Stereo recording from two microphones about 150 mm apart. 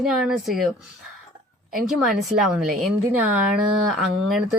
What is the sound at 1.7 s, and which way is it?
Speech, 70° right (ahead or behind).